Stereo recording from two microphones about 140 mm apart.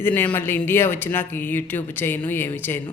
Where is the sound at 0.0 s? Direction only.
15° left (ahead or behind).